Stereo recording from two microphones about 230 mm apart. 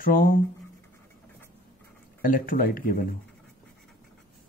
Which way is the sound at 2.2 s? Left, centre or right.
Left.